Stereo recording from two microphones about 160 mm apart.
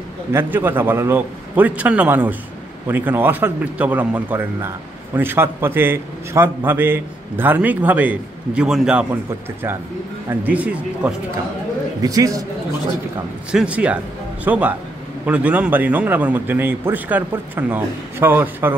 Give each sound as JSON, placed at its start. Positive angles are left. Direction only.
{"t": 0.3, "sound": "a man's voice", "side_deg": -15}
{"t": 12.0, "sound": "a man's voice", "side_deg": -20}
{"t": 13.5, "sound": "a man's voice", "side_deg": -5}